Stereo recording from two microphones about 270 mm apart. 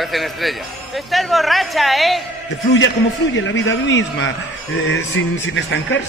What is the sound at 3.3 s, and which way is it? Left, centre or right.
A man's voice, left.